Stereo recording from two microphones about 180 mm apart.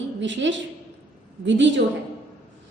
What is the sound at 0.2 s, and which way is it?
A woman's voice, 90° right.